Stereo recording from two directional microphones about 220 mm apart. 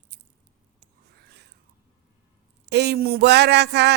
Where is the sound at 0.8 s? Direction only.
50° right (ahead or behind).